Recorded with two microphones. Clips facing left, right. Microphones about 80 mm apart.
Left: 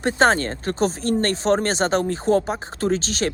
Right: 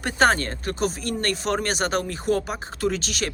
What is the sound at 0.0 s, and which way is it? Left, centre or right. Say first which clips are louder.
Speech: left 2 dB; left.